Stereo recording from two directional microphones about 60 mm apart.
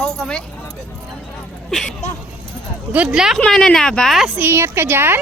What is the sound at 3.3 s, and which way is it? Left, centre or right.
Speech, centre.